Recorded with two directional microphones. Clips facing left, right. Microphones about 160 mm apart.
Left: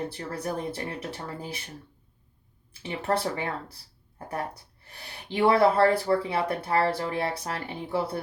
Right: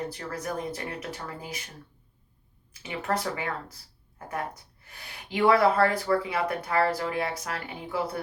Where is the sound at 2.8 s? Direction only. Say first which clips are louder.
Left 2 dB; 30° left (ahead or behind).